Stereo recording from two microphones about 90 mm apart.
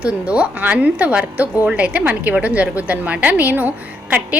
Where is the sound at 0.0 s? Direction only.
15° right (ahead or behind).